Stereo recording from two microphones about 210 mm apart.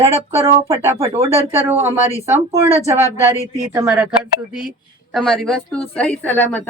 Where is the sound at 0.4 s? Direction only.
15° right (ahead or behind).